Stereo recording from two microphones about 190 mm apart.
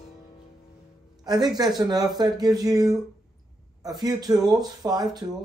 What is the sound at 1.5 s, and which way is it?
A man's voice, 20° right (ahead or behind).